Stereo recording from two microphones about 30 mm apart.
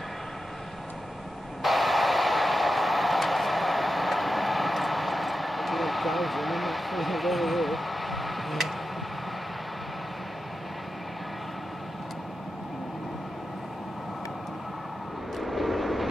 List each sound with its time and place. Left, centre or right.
1.6 s train: centre
15.4 s vehicle: centre